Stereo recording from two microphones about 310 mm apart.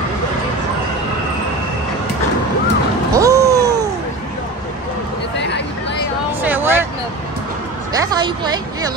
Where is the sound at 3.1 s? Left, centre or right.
Centre.